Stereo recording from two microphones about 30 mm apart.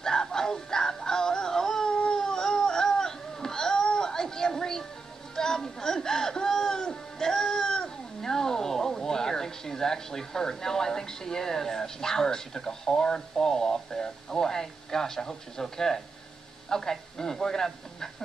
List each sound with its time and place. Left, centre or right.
0.0 s music: left
2.1 s a sound: left
5.3 s music: centre
13.5 s radio: centre
16.6 s a man's voice: left